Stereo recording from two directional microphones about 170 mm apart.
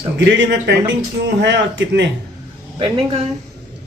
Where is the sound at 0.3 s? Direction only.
90° right.